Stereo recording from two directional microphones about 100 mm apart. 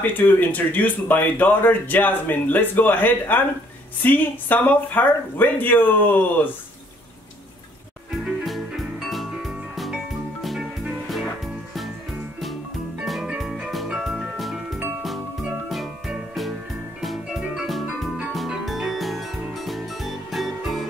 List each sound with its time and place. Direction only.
0.0 s speech: 20° left (ahead or behind)
8.5 s music: centre (ahead or behind)
13.0 s music: centre (ahead or behind)